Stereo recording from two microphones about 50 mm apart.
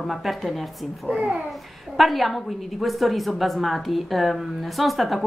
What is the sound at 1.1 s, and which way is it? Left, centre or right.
Speech, right.